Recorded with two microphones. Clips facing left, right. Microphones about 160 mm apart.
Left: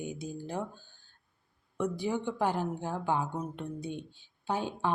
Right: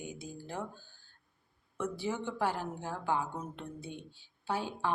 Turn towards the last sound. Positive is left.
turn(degrees=20)  # may be behind; listen again after turning